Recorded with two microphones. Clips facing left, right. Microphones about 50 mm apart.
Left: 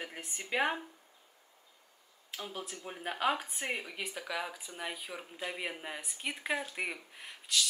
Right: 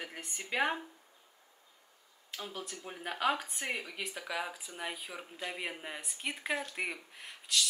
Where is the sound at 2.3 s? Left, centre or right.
Centre.